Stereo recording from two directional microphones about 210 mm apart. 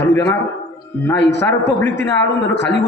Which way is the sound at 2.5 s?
55° left (ahead or behind).